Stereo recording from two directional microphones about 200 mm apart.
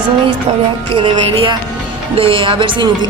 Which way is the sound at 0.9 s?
25° right (ahead or behind).